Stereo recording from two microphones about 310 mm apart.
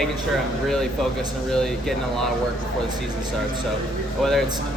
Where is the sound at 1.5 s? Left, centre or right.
Centre.